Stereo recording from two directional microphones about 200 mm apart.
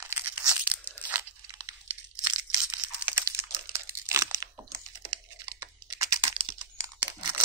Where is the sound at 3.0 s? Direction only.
10° right (ahead or behind).